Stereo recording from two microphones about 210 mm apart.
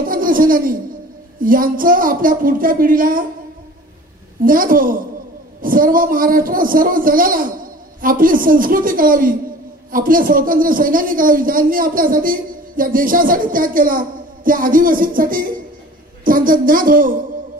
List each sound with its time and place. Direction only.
0.0 s a sound: 40° right (ahead or behind)
1.4 s a man's voice: 40° right (ahead or behind)
4.5 s a man's voice: 40° right (ahead or behind)